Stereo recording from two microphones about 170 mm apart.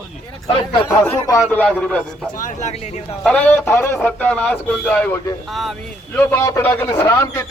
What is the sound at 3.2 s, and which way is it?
A man's voice, 5° left (ahead or behind).